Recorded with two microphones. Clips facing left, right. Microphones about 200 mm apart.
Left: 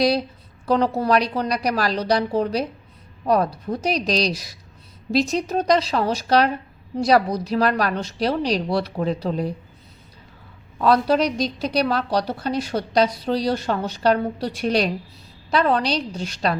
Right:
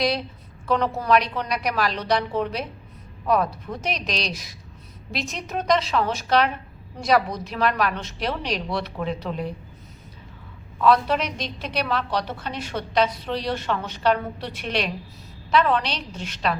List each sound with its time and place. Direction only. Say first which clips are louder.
0.6 s a woman's voice: left 4 dB; 35° left (ahead or behind)
10.8 s a woman's voice: left 2 dB; 35° left (ahead or behind)